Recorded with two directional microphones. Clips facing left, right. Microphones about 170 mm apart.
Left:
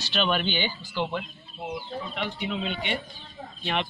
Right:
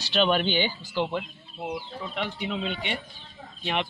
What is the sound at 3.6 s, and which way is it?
Speech, 15° right (ahead or behind).